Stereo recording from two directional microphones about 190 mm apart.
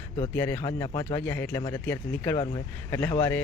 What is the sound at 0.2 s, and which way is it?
Speech, 10° left (ahead or behind).